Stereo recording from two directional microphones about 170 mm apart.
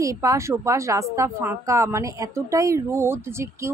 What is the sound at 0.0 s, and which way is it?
A woman's voice, 20° right (ahead or behind).